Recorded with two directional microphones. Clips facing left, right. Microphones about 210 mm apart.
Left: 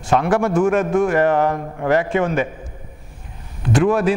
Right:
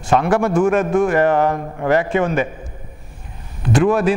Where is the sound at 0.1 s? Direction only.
15° right (ahead or behind).